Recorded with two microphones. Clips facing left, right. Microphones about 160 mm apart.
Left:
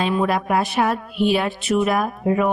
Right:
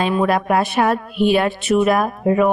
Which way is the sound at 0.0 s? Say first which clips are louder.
Right 3 dB; 65° right (ahead or behind).